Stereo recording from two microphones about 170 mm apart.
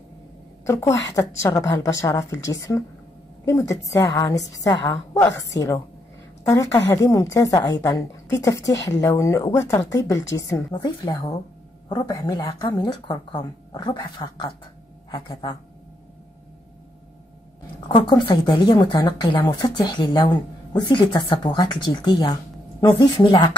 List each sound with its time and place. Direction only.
0.7 s a woman's voice: 15° left (ahead or behind)
6.4 s a woman's voice: 15° left (ahead or behind)
17.8 s speech: 25° left (ahead or behind)